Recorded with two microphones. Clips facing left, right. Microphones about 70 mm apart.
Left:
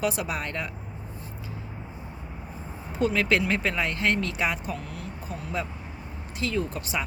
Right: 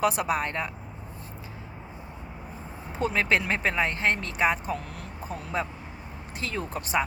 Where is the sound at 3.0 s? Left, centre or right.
Right.